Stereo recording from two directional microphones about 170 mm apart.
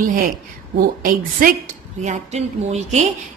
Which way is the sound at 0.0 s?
55° right (ahead or behind).